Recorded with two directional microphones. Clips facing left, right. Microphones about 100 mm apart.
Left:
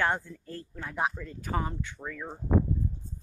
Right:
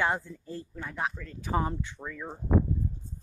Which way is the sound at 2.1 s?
5° right (ahead or behind).